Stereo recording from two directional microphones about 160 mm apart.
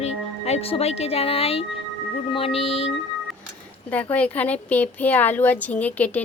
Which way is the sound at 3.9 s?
10° left (ahead or behind).